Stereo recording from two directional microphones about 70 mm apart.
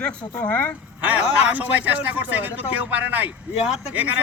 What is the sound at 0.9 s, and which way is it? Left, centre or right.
Speech, right.